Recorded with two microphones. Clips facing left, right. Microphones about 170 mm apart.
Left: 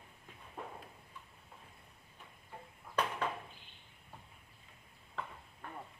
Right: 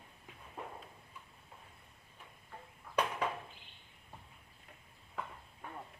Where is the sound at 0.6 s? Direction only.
Centre (ahead or behind).